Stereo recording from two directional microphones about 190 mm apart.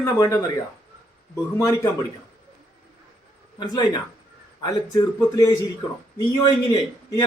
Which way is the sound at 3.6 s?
20° left (ahead or behind).